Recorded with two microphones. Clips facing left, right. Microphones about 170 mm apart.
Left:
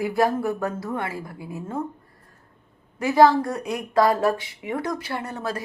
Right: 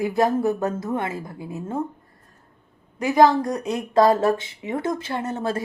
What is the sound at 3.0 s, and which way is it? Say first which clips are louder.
Speech: even; 20° right (ahead or behind).